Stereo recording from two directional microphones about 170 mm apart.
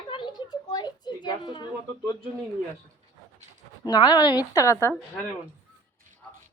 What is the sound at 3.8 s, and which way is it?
A child's voice, 25° left (ahead or behind).